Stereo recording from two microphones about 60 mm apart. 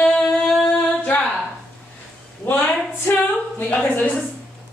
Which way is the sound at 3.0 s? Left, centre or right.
Left.